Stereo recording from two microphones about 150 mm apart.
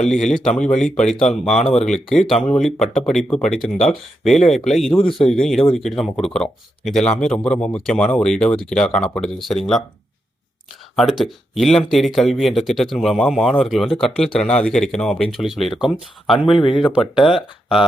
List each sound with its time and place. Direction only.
0.4 s speech: 5° left (ahead or behind)
10.9 s speech: centre (ahead or behind)
16.6 s speech: 35° left (ahead or behind)
17.2 s speech: 5° right (ahead or behind)